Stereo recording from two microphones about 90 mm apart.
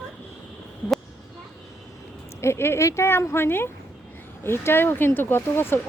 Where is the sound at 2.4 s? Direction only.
30° left (ahead or behind).